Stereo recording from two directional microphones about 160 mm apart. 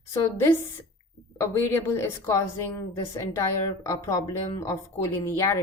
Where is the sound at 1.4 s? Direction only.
15° left (ahead or behind).